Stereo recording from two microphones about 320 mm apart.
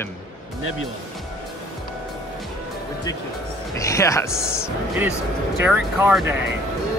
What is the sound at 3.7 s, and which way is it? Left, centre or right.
Speech, centre.